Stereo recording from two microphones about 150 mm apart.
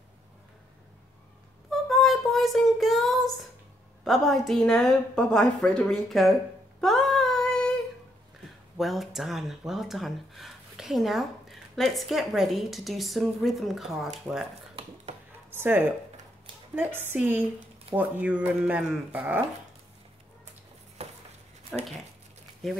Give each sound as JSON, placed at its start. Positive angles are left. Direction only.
{"t": 1.7, "sound": "child singing", "side_deg": 0}
{"t": 4.0, "sound": "speech", "side_deg": 0}
{"t": 6.8, "sound": "female singing", "side_deg": 0}
{"t": 8.7, "sound": "speech", "side_deg": 0}
{"t": 15.5, "sound": "speech", "side_deg": -15}
{"t": 21.0, "sound": "a sound", "side_deg": -45}
{"t": 21.7, "sound": "speech", "side_deg": 5}